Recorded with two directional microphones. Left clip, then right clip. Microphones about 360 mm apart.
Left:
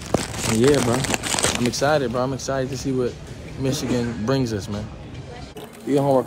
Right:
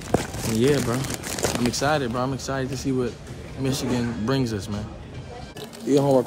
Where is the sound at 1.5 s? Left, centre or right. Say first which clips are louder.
Left 1 dB; centre.